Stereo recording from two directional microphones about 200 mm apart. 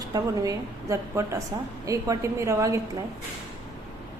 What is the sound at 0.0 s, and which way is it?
A woman's voice, 15° right (ahead or behind).